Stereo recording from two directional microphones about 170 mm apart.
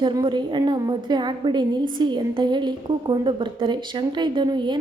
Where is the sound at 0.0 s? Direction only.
25° right (ahead or behind).